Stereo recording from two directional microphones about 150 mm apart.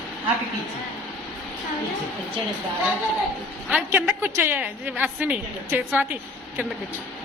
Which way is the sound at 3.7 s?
5° right (ahead or behind).